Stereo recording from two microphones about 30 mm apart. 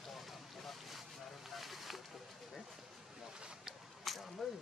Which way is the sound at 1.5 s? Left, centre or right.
Centre.